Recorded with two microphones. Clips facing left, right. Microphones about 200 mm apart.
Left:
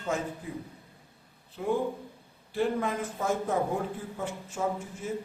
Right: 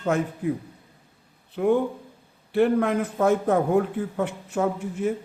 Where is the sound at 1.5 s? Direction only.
65° right (ahead or behind).